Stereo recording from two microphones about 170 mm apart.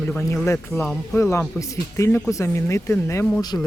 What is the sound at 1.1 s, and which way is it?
Speech, 15° left (ahead or behind).